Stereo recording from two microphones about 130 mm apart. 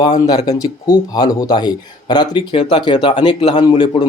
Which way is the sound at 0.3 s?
30° left (ahead or behind).